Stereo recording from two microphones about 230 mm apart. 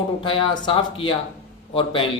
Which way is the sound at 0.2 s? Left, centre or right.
Left.